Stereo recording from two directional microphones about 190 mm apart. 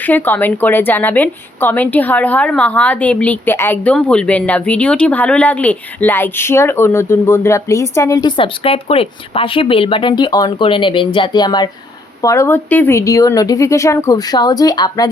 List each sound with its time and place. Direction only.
0.0 s a woman's voice: 10° left (ahead or behind)